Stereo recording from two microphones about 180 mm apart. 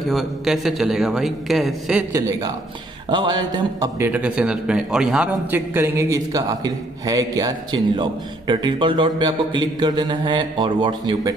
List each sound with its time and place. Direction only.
0.1 s a man's voice: centre (ahead or behind)
2.1 s a man's voice: 20° right (ahead or behind)
4.0 s a man's voice: 5° right (ahead or behind); by 11.3 s 25° right (ahead or behind)